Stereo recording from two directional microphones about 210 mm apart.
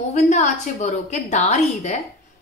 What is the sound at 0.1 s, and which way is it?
A woman's voice, 35° left (ahead or behind).